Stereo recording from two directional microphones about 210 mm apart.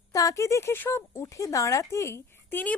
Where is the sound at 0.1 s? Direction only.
15° left (ahead or behind).